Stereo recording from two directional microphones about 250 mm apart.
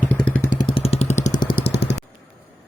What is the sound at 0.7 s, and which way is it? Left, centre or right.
Vehicle, left.